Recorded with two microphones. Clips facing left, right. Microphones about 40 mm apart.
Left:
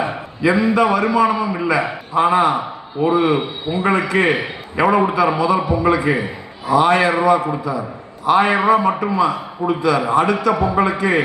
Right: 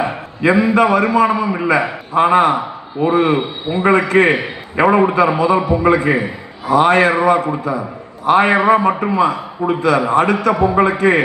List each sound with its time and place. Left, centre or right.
0.0 s a man's voice: right